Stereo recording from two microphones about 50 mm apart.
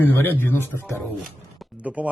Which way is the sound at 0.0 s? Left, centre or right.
Left.